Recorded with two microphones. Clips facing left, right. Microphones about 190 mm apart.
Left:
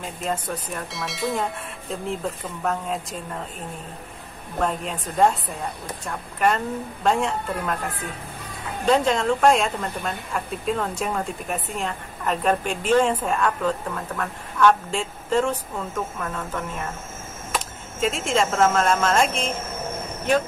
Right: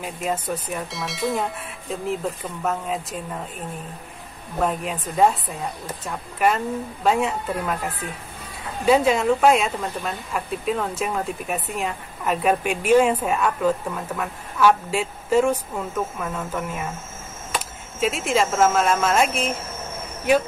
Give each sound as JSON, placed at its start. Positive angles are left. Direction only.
{"t": 0.0, "sound": "speech", "side_deg": -10}
{"t": 4.6, "sound": "speech", "side_deg": -5}
{"t": 8.8, "sound": "speech", "side_deg": -5}
{"t": 18.0, "sound": "speech", "side_deg": -5}
{"t": 20.3, "sound": "speech", "side_deg": -10}